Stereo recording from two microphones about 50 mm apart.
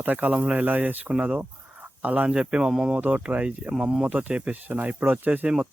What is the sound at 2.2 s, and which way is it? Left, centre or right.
Speech, centre.